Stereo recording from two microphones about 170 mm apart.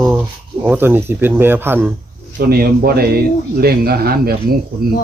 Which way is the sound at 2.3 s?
65° right (ahead or behind).